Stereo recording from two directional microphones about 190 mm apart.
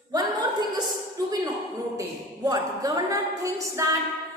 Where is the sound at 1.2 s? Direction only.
15° right (ahead or behind).